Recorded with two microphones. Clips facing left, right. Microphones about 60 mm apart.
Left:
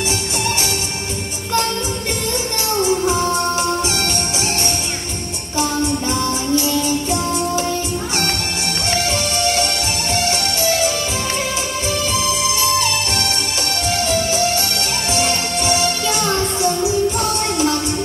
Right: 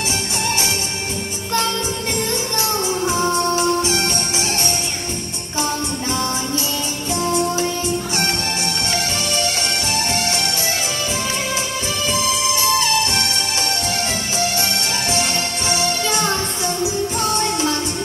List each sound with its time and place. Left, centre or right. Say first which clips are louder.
3.9 s music: even; right
6.1 s music: left 2 dB; right
6.6 s music: left 6 dB; left
9.1 s music: left 3 dB; left
10.2 s music: left 3 dB; right
12.4 s music: right 2 dB; right